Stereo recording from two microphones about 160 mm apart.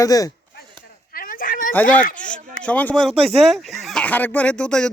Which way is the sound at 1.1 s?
60° left (ahead or behind).